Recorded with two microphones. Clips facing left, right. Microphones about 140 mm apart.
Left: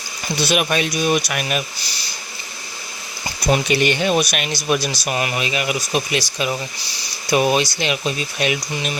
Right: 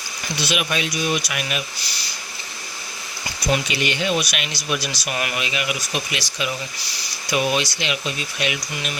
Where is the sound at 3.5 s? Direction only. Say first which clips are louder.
Left 5 dB; 45° left (ahead or behind).